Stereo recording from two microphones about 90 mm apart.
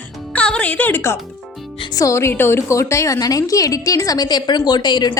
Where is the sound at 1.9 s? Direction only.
35° left (ahead or behind).